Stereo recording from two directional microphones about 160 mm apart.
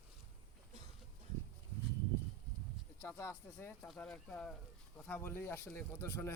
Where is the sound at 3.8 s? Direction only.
Centre (ahead or behind).